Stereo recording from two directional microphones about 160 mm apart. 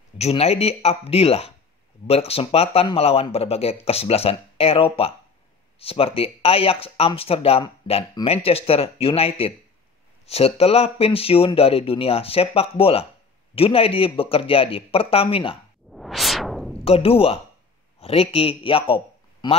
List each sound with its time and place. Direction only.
0.2 s speech: 40° left (ahead or behind)
15.9 s whoosh: centre (ahead or behind)
16.8 s a man's voice: 35° left (ahead or behind)